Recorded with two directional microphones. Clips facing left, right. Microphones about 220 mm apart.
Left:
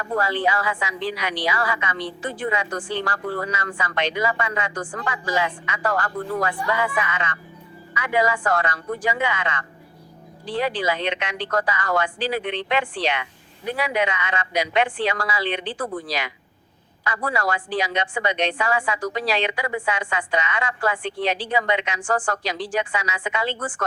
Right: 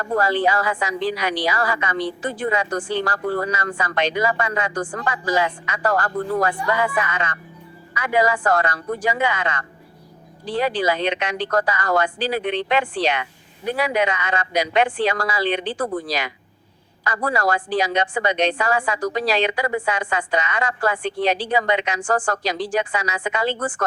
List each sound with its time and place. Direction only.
0.0 s a woman's voice: 40° right (ahead or behind)